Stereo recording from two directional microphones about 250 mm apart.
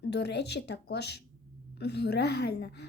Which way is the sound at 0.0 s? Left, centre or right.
Left.